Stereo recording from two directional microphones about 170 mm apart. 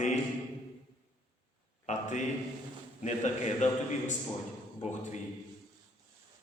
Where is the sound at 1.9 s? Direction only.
45° left (ahead or behind).